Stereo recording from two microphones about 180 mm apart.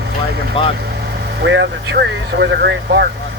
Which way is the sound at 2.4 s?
70° right (ahead or behind).